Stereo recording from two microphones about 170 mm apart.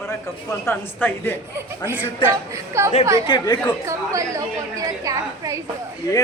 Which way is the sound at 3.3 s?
25° left (ahead or behind).